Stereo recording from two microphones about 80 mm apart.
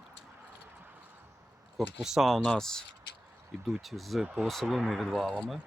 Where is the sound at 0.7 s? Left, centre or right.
Right.